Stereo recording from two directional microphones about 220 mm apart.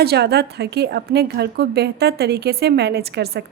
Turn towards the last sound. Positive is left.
turn(degrees=-45)  # may be behind; listen again after turning